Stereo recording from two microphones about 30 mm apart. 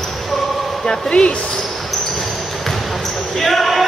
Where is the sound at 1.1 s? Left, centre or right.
Left.